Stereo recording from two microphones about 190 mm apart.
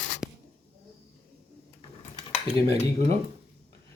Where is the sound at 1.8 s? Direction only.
25° left (ahead or behind).